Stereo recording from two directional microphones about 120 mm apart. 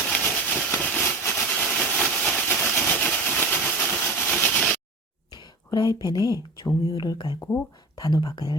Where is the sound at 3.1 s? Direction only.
15° left (ahead or behind).